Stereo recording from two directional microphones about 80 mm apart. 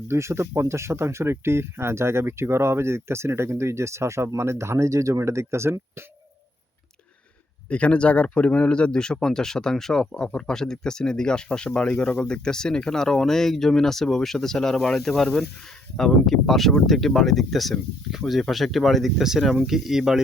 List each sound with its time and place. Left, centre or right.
0.1 s speech: right
7.7 s speech: centre